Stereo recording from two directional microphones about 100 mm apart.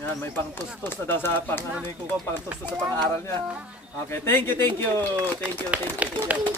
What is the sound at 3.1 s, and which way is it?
Speech, 25° left (ahead or behind).